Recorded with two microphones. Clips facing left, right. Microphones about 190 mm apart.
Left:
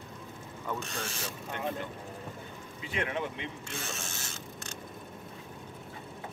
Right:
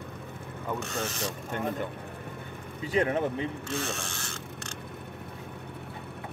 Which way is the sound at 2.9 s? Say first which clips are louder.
Right 8 dB; 40° right (ahead or behind).